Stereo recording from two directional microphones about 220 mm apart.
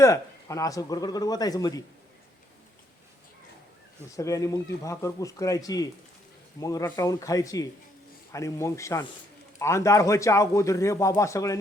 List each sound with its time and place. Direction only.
0.0 s a man's voice: 15° left (ahead or behind)
4.2 s a man's voice: 15° left (ahead or behind)